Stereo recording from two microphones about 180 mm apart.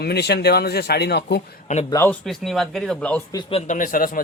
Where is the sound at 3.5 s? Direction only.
40° left (ahead or behind).